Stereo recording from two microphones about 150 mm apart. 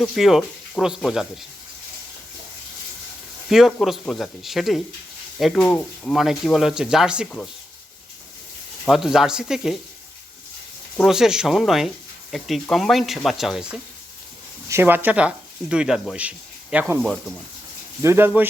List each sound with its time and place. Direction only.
0.0 s speech: centre (ahead or behind)
3.7 s speech: centre (ahead or behind)
8.8 s speech: centre (ahead or behind)
11.0 s speech: 5° right (ahead or behind)
14.7 s speech: 15° right (ahead or behind)
18.0 s speech: 15° right (ahead or behind)